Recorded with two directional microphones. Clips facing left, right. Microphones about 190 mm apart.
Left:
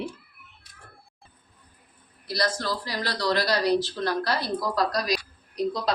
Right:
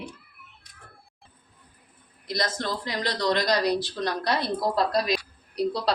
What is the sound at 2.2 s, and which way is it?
A woman's voice, 20° right (ahead or behind).